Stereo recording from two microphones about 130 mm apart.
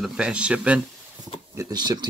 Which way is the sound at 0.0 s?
5° right (ahead or behind).